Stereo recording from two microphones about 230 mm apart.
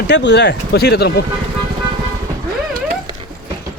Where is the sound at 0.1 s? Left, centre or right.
Left.